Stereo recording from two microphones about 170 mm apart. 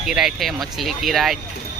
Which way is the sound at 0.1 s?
5° right (ahead or behind).